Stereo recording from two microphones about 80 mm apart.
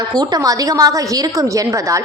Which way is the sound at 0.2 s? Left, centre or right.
Right.